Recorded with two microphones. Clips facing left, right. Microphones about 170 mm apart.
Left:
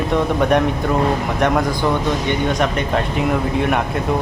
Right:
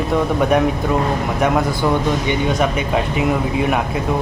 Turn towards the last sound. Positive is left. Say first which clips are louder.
# right 1 dB
turn(degrees=-5)  # may be behind; listen again after turning